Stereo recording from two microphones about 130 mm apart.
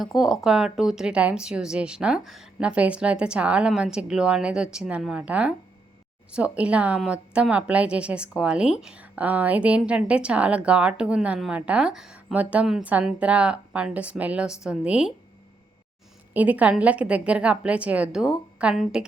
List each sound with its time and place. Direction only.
0.0 s a woman's voice: centre (ahead or behind)
16.3 s a woman's voice: 10° right (ahead or behind)